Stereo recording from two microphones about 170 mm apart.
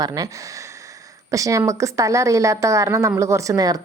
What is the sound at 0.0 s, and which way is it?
Speech, 20° right (ahead or behind).